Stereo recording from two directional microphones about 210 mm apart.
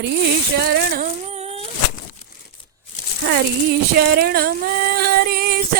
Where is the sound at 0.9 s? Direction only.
30° right (ahead or behind).